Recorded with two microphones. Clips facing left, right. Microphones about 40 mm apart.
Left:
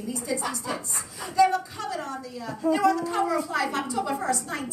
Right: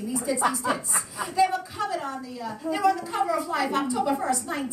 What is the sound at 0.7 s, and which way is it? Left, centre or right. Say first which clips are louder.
A woman's voice: right 4 dB; centre.